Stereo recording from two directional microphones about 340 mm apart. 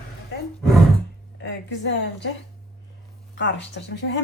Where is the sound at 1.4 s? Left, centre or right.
Left.